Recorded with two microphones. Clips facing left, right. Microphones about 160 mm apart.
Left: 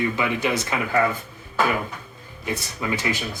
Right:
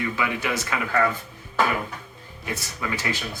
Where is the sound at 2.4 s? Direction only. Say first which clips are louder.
Left 3 dB; 20° left (ahead or behind).